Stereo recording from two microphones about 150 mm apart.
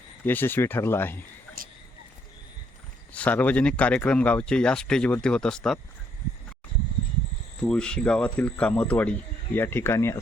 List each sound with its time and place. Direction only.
0.3 s speech: 15° left (ahead or behind)
3.1 s speech: 10° left (ahead or behind)
7.6 s speech: 5° left (ahead or behind)